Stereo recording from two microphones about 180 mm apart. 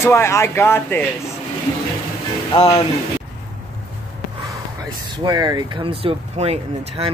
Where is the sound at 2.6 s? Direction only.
35° left (ahead or behind).